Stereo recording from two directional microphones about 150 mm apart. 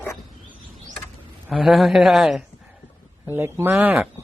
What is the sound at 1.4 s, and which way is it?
Speech, 5° right (ahead or behind).